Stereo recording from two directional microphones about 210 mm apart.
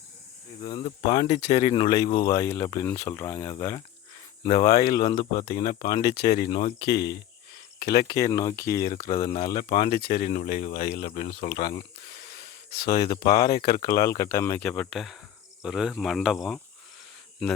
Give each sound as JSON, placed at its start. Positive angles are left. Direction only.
{"t": 0.6, "sound": "speech", "side_deg": 20}
{"t": 6.0, "sound": "speech", "side_deg": 50}
{"t": 6.5, "sound": "speech", "side_deg": 35}
{"t": 6.7, "sound": "speech", "side_deg": 50}
{"t": 8.0, "sound": "speech", "side_deg": 15}
{"t": 9.9, "sound": "speech", "side_deg": 50}
{"t": 13.1, "sound": "speech", "side_deg": 50}
{"t": 13.9, "sound": "speech", "side_deg": 15}